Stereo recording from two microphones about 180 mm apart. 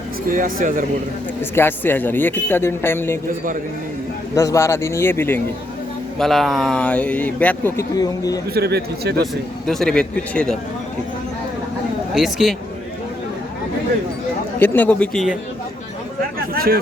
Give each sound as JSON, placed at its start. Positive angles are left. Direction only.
{"t": 0.3, "sound": "speech", "side_deg": -50}
{"t": 1.4, "sound": "a man's voice", "side_deg": 10}
{"t": 4.4, "sound": "a man's voice", "side_deg": 15}
{"t": 6.1, "sound": "a man's voice", "side_deg": 0}
{"t": 8.5, "sound": "a man's voice", "side_deg": -65}
{"t": 9.6, "sound": "speech", "side_deg": 5}
{"t": 12.1, "sound": "speech", "side_deg": 0}
{"t": 14.6, "sound": "a man's voice", "side_deg": 10}